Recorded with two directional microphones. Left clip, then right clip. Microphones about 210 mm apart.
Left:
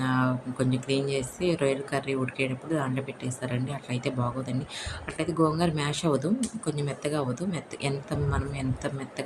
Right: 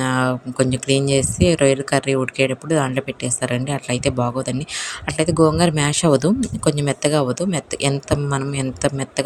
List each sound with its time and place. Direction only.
0.0 s speech: 40° right (ahead or behind)